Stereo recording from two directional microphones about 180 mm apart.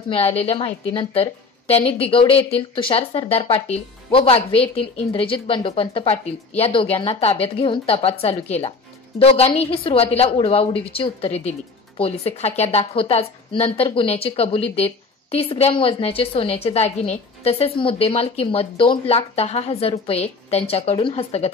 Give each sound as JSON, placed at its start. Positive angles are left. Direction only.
{"t": 0.1, "sound": "a woman's voice", "side_deg": 35}